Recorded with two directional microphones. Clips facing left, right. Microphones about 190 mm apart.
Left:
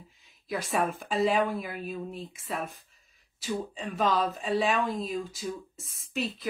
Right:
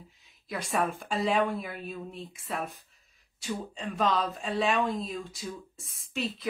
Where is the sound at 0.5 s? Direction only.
Centre (ahead or behind).